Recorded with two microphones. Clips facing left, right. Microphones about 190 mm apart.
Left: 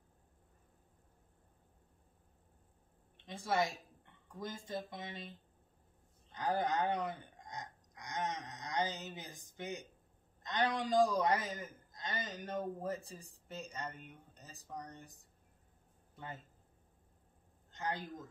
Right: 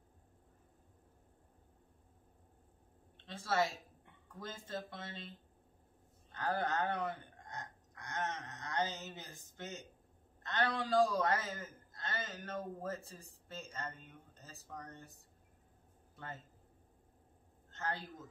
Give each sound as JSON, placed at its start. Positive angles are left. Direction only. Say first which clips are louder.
{"t": 3.3, "sound": "a woman's voice", "louder": "even", "side_deg": 15}
{"t": 6.3, "sound": "a man's voice", "louder": "left 2 dB", "side_deg": 15}
{"t": 17.6, "sound": "speech", "louder": "left 1 dB", "side_deg": 15}